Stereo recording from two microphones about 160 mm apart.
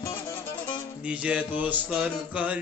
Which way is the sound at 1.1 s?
5° right (ahead or behind).